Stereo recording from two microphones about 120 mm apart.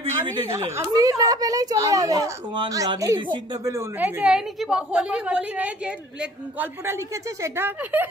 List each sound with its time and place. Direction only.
0.1 s a woman's voice: 25° right (ahead or behind)
4.0 s a woman's voice: 10° right (ahead or behind)
7.4 s a woman's voice: 20° right (ahead or behind)